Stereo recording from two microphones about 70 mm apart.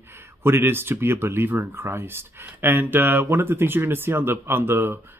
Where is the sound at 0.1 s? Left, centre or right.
Right.